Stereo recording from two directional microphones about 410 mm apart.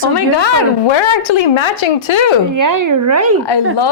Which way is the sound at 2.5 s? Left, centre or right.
Right.